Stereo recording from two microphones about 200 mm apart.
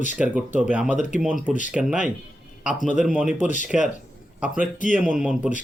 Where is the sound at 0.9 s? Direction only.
40° left (ahead or behind).